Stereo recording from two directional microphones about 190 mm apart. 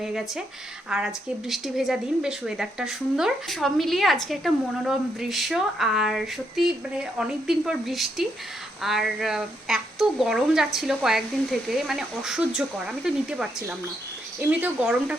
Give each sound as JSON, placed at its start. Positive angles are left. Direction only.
{"t": 0.0, "sound": "speech", "side_deg": 0}
{"t": 14.6, "sound": "speech", "side_deg": -5}